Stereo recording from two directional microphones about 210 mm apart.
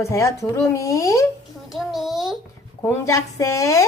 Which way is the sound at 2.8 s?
15° left (ahead or behind).